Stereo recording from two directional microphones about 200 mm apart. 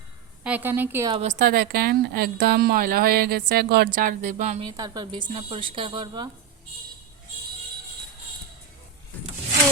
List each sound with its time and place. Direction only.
0.4 s a woman's voice: 10° right (ahead or behind)
1.1 s a woman's voice: 35° right (ahead or behind)
4.8 s a woman's voice: 20° right (ahead or behind)